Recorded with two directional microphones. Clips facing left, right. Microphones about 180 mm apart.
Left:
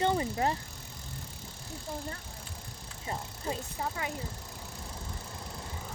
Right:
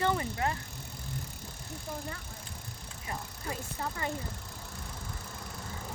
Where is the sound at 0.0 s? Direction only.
25° left (ahead or behind).